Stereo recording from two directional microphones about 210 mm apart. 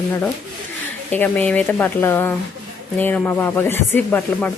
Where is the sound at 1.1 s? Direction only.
10° left (ahead or behind).